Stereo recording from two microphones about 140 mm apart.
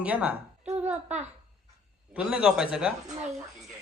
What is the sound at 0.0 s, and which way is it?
Speech, 10° right (ahead or behind).